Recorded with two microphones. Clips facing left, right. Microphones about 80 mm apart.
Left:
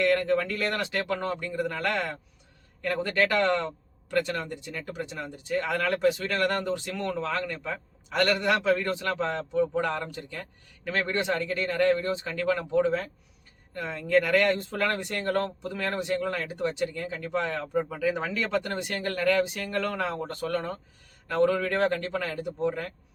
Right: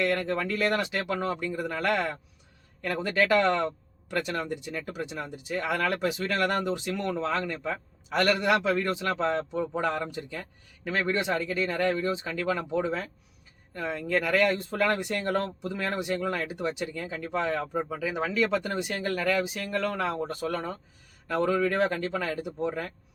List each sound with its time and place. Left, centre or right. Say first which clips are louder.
0.0 s speech: left 3 dB; centre
17.8 s speech: left 2 dB; centre